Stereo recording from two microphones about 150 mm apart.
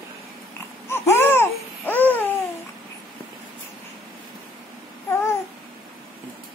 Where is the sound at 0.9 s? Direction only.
15° left (ahead or behind).